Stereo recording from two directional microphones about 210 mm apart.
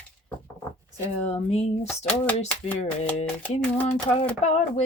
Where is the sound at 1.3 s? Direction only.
30° left (ahead or behind).